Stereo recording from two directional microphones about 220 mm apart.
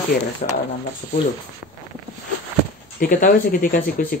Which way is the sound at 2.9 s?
40° left (ahead or behind).